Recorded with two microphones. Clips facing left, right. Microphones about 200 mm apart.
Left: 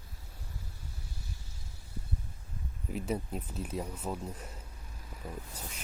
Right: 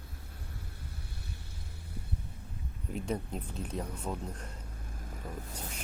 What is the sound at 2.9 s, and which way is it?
Speech, 5° left (ahead or behind).